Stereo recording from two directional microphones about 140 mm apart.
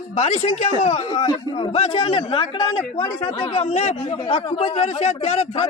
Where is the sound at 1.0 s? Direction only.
35° left (ahead or behind).